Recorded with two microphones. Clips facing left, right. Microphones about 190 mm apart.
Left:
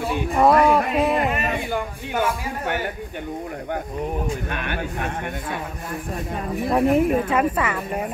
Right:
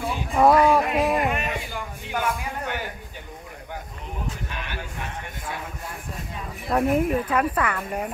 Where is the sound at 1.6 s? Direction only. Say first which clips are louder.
Left 8 dB; 55° left (ahead or behind).